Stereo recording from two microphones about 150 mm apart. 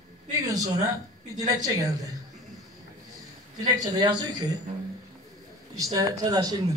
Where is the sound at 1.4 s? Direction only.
25° right (ahead or behind).